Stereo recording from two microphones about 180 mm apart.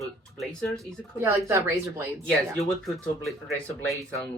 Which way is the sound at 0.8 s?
15° right (ahead or behind).